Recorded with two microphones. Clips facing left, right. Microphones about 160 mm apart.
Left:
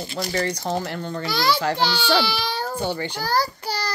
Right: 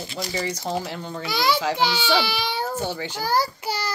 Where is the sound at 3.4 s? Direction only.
35° left (ahead or behind).